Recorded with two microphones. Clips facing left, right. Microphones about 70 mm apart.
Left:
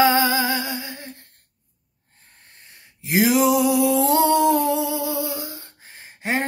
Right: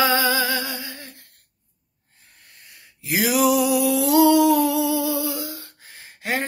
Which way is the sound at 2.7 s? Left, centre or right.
Left.